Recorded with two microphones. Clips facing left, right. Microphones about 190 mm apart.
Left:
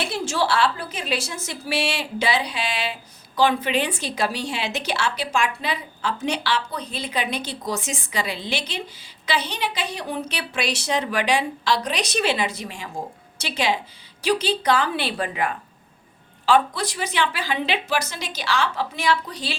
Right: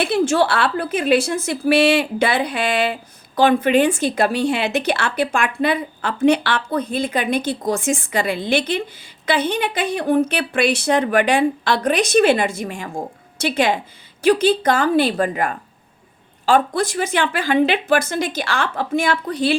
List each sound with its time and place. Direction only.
0.0 s a woman's voice: 55° right (ahead or behind)